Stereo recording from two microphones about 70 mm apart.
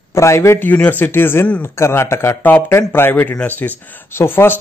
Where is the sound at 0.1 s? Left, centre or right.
Left.